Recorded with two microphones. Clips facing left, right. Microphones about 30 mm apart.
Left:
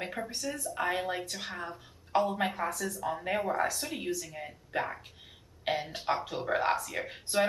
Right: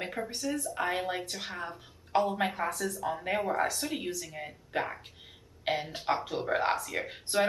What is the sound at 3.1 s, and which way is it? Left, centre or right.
Speech, centre.